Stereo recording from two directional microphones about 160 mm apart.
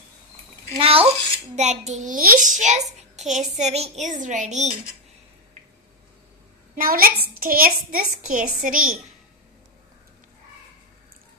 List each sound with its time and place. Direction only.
0.7 s a child's voice: 35° right (ahead or behind)
6.7 s a woman's voice: 65° right (ahead or behind)